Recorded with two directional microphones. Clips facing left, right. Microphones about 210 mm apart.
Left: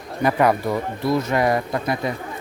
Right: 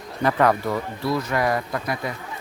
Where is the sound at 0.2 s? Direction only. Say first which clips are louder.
Left 1 dB; 10° left (ahead or behind).